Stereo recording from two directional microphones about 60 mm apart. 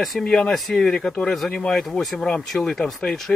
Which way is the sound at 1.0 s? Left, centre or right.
Centre.